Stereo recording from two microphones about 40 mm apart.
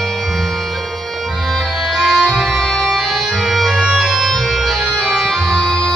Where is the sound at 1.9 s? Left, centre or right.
Centre.